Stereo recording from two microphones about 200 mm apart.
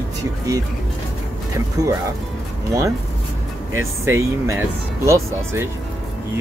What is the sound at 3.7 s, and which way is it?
Speech, 15° right (ahead or behind).